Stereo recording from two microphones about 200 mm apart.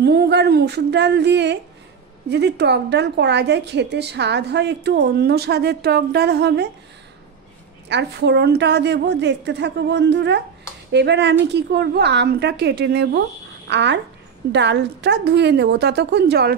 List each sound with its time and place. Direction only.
0.0 s a woman's voice: 55° right (ahead or behind)
7.9 s a woman's voice: 60° right (ahead or behind)